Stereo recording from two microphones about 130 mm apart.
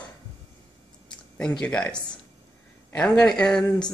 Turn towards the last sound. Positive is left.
turn(degrees=5)  # may be behind; listen again after turning